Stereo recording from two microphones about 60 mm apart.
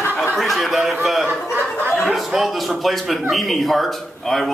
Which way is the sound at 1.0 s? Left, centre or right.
Centre.